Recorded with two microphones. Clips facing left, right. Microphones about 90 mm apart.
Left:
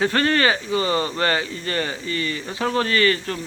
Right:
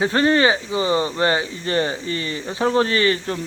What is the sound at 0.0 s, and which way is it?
Speech, 20° right (ahead or behind).